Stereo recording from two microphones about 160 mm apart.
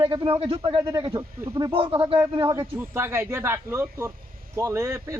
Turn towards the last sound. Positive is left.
turn(degrees=-20)  # may be behind; listen again after turning